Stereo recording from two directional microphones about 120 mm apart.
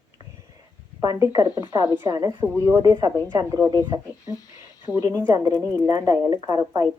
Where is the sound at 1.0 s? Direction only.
25° right (ahead or behind).